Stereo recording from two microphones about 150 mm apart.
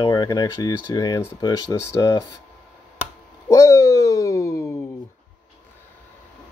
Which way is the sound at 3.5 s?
20° left (ahead or behind).